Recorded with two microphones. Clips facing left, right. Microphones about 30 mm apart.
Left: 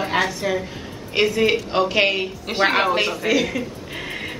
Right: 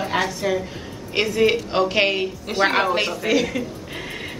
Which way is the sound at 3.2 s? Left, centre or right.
Centre.